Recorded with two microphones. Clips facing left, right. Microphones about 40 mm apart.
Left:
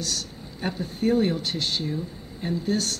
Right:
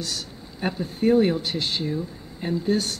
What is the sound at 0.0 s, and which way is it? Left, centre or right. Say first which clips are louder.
Speech: even; centre.